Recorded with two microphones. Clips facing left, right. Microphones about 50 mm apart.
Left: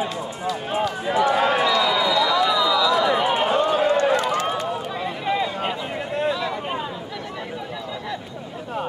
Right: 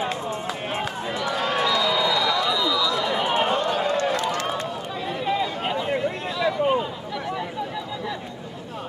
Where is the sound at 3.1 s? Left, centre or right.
Centre.